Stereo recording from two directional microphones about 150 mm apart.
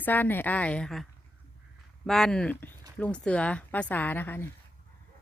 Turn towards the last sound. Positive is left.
turn(degrees=15)  # may be behind; listen again after turning